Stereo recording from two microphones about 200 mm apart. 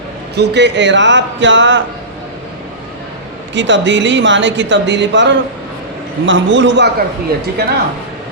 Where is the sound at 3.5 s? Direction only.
65° right (ahead or behind).